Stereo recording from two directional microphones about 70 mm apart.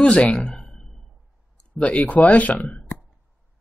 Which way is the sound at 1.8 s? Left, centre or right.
Centre.